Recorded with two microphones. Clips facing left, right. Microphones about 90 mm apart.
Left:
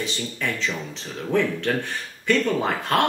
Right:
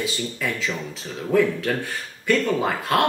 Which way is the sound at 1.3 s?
5° right (ahead or behind).